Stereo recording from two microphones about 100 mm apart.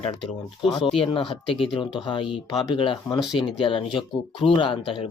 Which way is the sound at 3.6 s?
55° left (ahead or behind).